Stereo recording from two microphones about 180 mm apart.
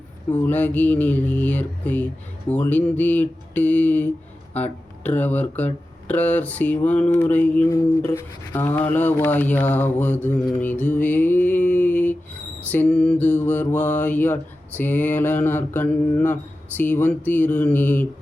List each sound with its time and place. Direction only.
0.3 s mantra: 10° left (ahead or behind)
10.6 s a sound: 10° left (ahead or behind)
12.7 s mantra: 5° left (ahead or behind)